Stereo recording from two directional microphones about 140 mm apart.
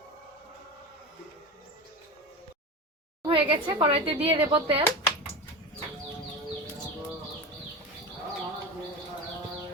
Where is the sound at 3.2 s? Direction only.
35° right (ahead or behind).